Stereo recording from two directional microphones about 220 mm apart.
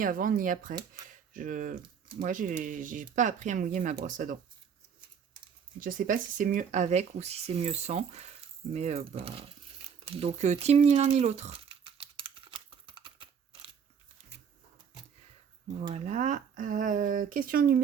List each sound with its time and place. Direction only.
0.0 s speech: 40° right (ahead or behind)
5.8 s speech: 40° right (ahead or behind)
10.1 s a sound: 25° right (ahead or behind)
15.7 s speech: 30° right (ahead or behind)